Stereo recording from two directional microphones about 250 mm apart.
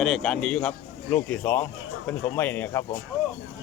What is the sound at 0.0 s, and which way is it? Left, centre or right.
A man's voice, centre.